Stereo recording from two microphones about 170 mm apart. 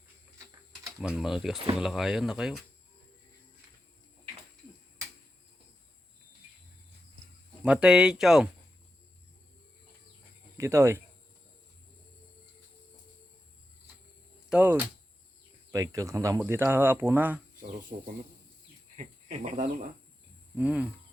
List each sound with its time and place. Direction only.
1.0 s speech: 5° right (ahead or behind)
7.6 s speech: 5° right (ahead or behind)
10.6 s speech: 15° right (ahead or behind)
14.5 s speech: 10° right (ahead or behind)
17.9 s speech: 50° right (ahead or behind)
20.6 s speech: 5° right (ahead or behind)